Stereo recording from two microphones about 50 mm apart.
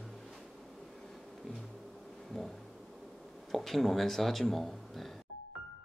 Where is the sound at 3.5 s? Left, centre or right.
Centre.